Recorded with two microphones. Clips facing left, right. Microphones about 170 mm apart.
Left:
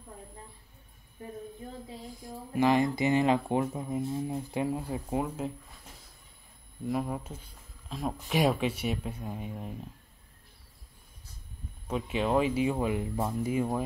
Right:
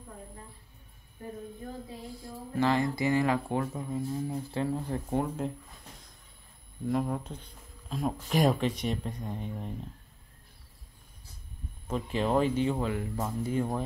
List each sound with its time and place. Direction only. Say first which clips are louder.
2.2 s speech: left 2 dB; 15° left (ahead or behind)
6.9 s speech: right 2 dB; 5° left (ahead or behind)
11.9 s speech: even; centre (ahead or behind)